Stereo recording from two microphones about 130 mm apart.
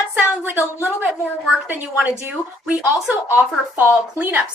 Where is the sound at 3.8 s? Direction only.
15° right (ahead or behind).